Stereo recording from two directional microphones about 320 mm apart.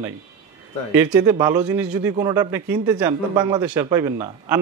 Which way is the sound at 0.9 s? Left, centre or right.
Centre.